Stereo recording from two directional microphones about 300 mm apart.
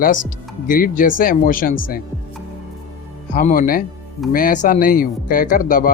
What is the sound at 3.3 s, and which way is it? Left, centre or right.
Speech, left.